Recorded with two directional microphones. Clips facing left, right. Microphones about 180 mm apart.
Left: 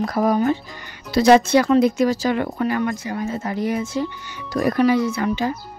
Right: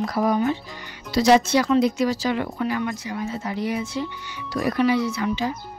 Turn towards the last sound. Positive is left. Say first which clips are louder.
# left 3 dB
turn(degrees=50)  # may be behind; listen again after turning